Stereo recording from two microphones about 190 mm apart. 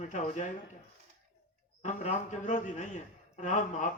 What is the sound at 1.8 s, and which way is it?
A man's voice, 40° left (ahead or behind).